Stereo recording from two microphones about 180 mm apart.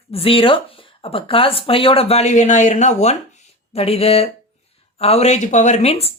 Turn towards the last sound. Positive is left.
turn(degrees=35)  # may be behind; listen again after turning